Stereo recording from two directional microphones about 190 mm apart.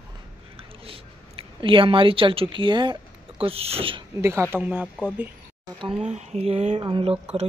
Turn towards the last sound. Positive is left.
turn(degrees=-25)  # may be behind; listen again after turning